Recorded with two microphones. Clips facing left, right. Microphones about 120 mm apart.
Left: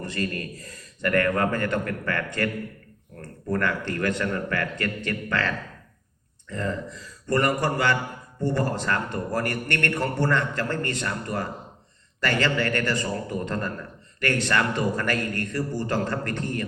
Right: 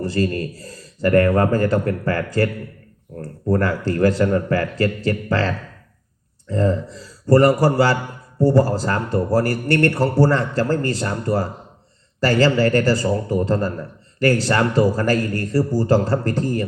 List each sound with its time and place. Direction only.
0.0 s a man's voice: 30° right (ahead or behind)